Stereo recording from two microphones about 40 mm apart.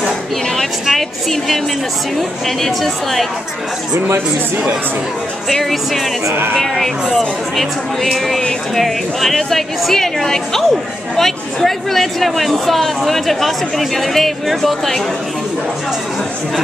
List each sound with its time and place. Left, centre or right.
0.8 s speech: centre
5.5 s a woman's voice: centre